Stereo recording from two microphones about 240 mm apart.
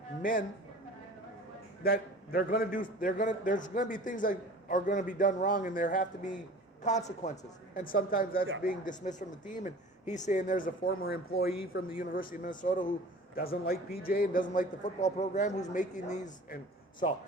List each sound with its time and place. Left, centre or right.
0.2 s a man's voice: left
1.8 s a man's voice: left